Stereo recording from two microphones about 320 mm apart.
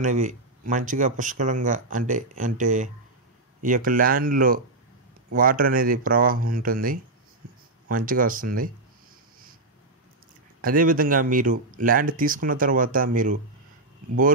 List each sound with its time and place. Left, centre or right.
0.0 s speech: right
10.6 s speech: right